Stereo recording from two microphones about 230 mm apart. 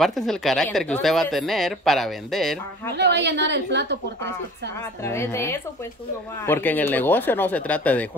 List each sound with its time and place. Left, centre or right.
0.0 s speech: centre
3.0 s a woman's voice: right
5.0 s speech: centre